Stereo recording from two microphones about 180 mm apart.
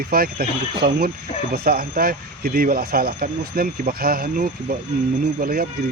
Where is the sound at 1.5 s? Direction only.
60° right (ahead or behind).